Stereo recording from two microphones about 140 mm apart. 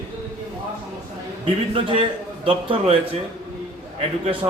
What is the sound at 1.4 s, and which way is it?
A man's voice, 40° right (ahead or behind).